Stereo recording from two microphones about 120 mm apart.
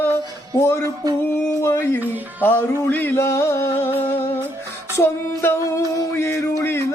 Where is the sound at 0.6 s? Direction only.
20° left (ahead or behind).